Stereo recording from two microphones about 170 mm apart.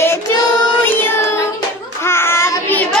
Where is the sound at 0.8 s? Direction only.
10° left (ahead or behind).